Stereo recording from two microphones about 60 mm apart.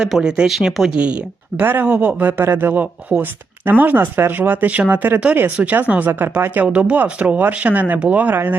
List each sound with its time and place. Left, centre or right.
0.0 s speech: centre
1.6 s speech: right
2.4 s speech: right